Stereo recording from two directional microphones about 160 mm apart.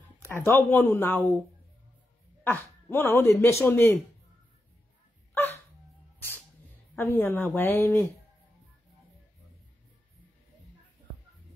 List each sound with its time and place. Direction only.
0.3 s speech: 10° left (ahead or behind)
2.9 s speech: 15° left (ahead or behind)
5.3 s dog: 15° left (ahead or behind)
7.0 s speech: 15° left (ahead or behind)